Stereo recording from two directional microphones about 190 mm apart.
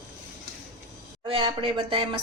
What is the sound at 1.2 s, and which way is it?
Speech, 25° right (ahead or behind).